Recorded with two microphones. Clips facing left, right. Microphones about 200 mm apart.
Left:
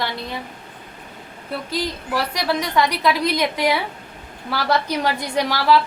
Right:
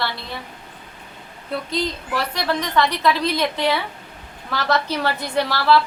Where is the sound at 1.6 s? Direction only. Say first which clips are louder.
Left 1 dB; 10° left (ahead or behind).